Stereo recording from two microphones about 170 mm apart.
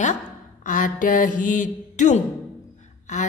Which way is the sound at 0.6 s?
50° left (ahead or behind).